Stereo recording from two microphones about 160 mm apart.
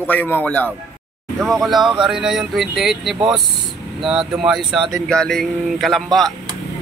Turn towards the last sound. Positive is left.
turn(degrees=0)  # may be behind; listen again after turning